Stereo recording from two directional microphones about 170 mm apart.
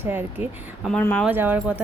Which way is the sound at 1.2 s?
10° right (ahead or behind).